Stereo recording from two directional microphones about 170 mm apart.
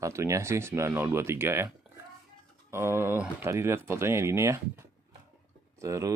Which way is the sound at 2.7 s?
15° right (ahead or behind).